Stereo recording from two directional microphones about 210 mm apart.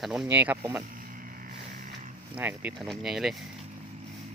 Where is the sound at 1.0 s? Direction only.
40° right (ahead or behind).